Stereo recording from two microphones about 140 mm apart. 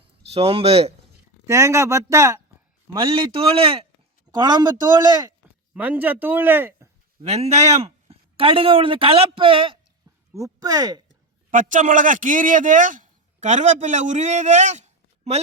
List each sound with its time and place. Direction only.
0.3 s speech: 45° right (ahead or behind)
1.5 s a man's voice: 20° right (ahead or behind)
2.9 s a man's voice: 40° right (ahead or behind)
4.4 s a man's voice: 30° right (ahead or behind)
5.7 s speech: 10° right (ahead or behind)
7.2 s speech: 50° right (ahead or behind)
10.3 s a man's voice: 25° right (ahead or behind)
11.5 s a man's voice: 65° right (ahead or behind)